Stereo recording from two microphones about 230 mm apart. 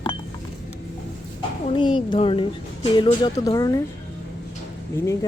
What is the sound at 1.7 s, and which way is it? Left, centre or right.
Speech, left.